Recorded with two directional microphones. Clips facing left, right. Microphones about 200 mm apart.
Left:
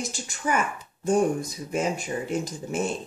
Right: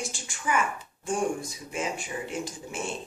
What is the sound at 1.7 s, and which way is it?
A woman's voice, 40° left (ahead or behind).